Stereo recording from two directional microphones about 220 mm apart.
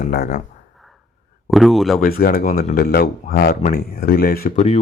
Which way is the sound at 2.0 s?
40° left (ahead or behind).